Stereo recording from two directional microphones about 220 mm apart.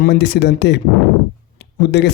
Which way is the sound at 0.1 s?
50° left (ahead or behind).